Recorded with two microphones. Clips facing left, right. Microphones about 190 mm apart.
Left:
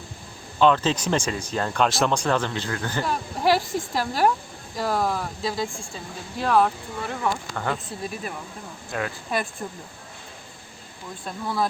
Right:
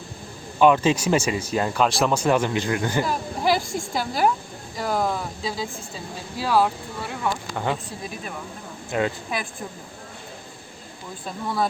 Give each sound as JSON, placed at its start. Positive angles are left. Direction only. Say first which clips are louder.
{"t": 0.6, "sound": "speech", "louder": "right 2 dB", "side_deg": -10}
{"t": 3.0, "sound": "a woman's voice", "louder": "right 1 dB", "side_deg": 0}
{"t": 8.9, "sound": "speech", "louder": "right 6 dB", "side_deg": -20}
{"t": 11.3, "sound": "a woman's voice", "louder": "right 1 dB", "side_deg": 0}